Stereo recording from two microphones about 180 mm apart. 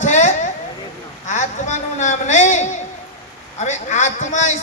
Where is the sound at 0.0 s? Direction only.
45° left (ahead or behind).